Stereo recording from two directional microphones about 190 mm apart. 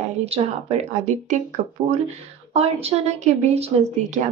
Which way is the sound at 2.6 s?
30° right (ahead or behind).